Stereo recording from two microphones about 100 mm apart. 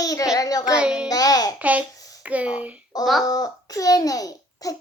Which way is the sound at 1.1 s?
40° left (ahead or behind).